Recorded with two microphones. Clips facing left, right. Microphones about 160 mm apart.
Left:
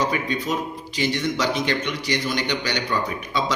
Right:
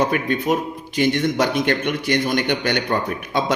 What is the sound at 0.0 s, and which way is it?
A man's voice, 55° right (ahead or behind).